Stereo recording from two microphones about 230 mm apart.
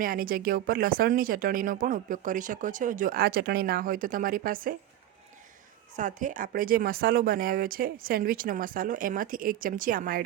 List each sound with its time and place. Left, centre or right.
0.0 s speech: right
6.0 s speech: right